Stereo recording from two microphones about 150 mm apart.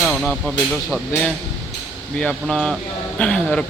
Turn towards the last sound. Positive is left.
turn(degrees=5)  # may be behind; listen again after turning